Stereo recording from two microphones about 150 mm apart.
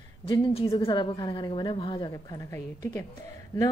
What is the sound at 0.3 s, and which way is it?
A woman's voice, 35° left (ahead or behind).